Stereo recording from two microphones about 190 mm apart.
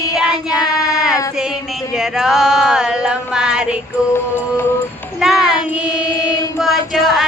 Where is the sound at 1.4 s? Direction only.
Centre (ahead or behind).